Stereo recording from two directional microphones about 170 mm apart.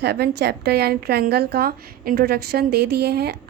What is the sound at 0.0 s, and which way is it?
A woman's voice, 75° right (ahead or behind).